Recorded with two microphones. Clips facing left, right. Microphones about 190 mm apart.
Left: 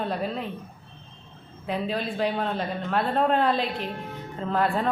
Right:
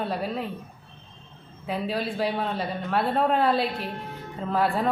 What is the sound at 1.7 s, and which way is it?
A woman's voice, 5° right (ahead or behind).